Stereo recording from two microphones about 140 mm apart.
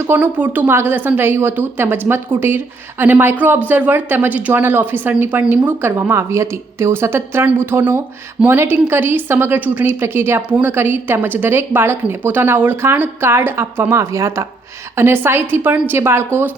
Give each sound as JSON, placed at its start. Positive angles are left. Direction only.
{"t": 0.0, "sound": "a woman's voice", "side_deg": -15}